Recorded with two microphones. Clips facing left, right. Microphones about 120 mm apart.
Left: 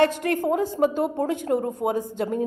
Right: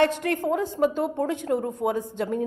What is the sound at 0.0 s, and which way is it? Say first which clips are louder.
A woman's voice: left 1 dB; 45° left (ahead or behind).